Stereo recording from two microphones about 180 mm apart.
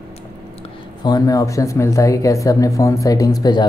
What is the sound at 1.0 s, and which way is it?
Speech, 20° left (ahead or behind).